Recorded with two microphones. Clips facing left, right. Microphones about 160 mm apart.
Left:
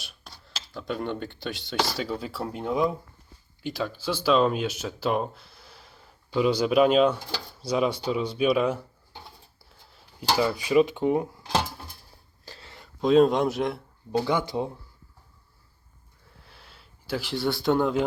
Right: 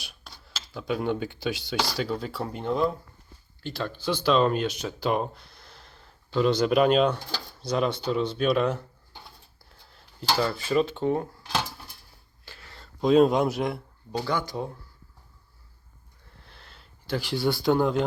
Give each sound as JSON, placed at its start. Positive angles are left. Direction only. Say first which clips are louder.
{"t": 0.0, "sound": "speech", "louder": "even", "side_deg": 0}
{"t": 9.6, "sound": "dishes", "louder": "even", "side_deg": 5}
{"t": 12.5, "sound": "a sound", "louder": "left 3 dB", "side_deg": 30}
{"t": 13.0, "sound": "speech", "louder": "even", "side_deg": 0}
{"t": 14.3, "sound": "speech", "louder": "even", "side_deg": 20}
{"t": 16.3, "sound": "a sound", "louder": "even", "side_deg": 5}